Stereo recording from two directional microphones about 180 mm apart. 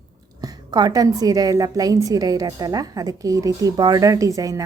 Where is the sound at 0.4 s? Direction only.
20° right (ahead or behind).